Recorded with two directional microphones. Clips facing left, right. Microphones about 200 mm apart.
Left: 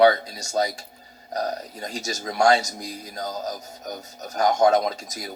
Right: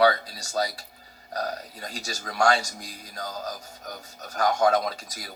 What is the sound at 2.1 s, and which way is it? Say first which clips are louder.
Speech: left 4 dB; 20° left (ahead or behind).